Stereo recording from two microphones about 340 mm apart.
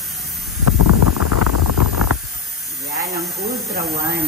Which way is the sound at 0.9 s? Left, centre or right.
Left.